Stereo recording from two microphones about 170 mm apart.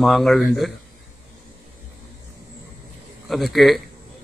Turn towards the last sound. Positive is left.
turn(degrees=0)  # may be behind; listen again after turning